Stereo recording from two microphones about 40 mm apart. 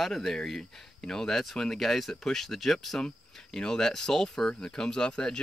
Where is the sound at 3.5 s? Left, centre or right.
Centre.